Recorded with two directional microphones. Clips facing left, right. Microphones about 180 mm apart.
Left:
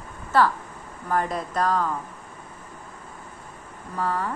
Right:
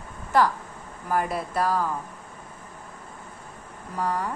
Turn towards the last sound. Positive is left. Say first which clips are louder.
# left 1 dB
turn(degrees=-15)  # may be behind; listen again after turning